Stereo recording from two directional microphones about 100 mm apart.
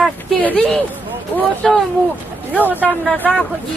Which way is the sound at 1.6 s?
Centre (ahead or behind).